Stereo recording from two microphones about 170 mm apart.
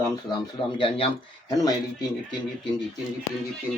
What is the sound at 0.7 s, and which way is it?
Speech, 30° left (ahead or behind).